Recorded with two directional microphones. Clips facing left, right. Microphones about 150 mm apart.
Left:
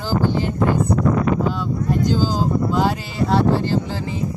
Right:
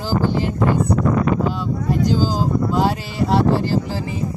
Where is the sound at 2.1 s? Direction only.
5° right (ahead or behind).